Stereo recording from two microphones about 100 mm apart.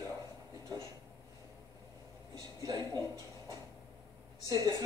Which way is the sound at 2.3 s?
35° right (ahead or behind).